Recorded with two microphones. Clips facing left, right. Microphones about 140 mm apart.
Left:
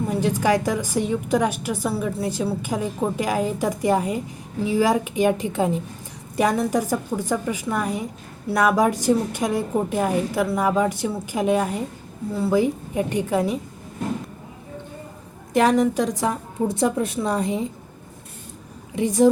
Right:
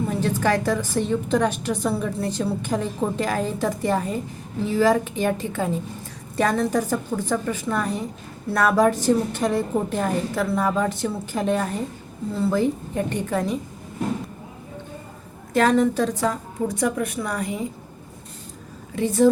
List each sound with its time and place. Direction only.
0.1 s a woman's voice: 15° left (ahead or behind)
15.5 s a woman's voice: 15° left (ahead or behind)
18.9 s a woman's voice: 15° left (ahead or behind)